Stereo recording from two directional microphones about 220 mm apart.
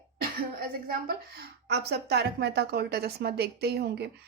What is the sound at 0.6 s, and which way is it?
A woman's voice, 45° right (ahead or behind).